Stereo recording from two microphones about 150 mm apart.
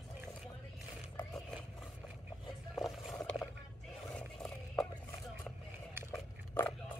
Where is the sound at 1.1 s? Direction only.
Centre (ahead or behind).